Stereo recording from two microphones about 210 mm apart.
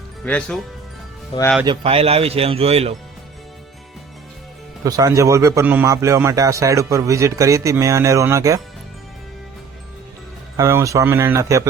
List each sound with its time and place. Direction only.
0.3 s speech: 5° left (ahead or behind)
1.6 s a man's voice: 25° right (ahead or behind)
4.8 s speech: 15° right (ahead or behind)
10.6 s speech: 15° right (ahead or behind)